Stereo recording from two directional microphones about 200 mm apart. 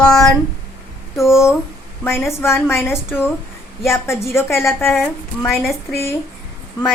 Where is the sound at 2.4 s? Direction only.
15° left (ahead or behind).